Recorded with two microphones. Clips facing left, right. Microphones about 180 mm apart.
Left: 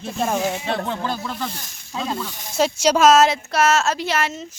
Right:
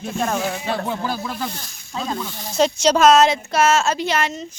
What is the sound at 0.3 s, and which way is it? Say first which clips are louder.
Speech: left 3 dB; 20° left (ahead or behind).